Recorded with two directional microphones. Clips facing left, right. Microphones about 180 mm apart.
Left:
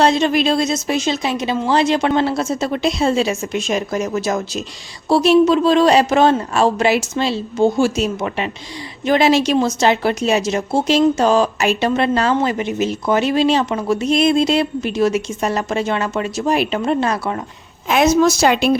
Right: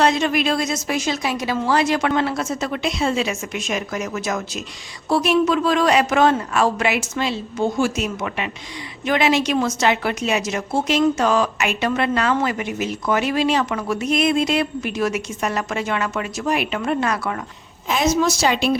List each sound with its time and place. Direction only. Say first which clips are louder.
0.0 s speech: left 4 dB; 30° left (ahead or behind)
17.8 s a woman's voice: left 5 dB; 60° left (ahead or behind)